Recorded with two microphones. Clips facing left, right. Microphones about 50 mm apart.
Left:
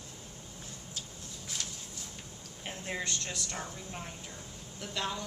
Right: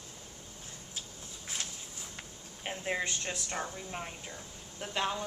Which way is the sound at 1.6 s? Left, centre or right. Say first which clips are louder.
Even; right.